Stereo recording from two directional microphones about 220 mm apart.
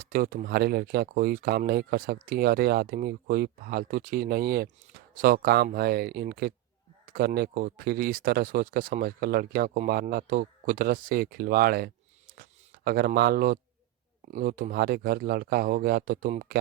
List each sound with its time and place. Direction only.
0.0 s speech: 40° right (ahead or behind)